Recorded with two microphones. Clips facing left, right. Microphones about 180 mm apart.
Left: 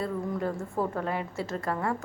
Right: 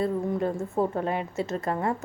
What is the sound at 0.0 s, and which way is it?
Speech, 25° right (ahead or behind).